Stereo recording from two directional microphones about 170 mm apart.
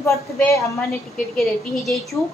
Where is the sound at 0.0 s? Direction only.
15° left (ahead or behind).